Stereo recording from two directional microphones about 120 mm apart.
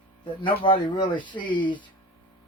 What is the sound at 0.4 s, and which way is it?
Speech, 45° left (ahead or behind).